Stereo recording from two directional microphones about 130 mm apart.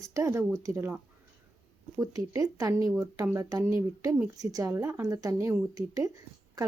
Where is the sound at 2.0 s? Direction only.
30° right (ahead or behind).